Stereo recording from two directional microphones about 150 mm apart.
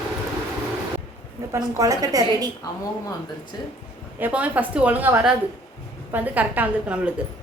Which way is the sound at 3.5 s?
25° left (ahead or behind).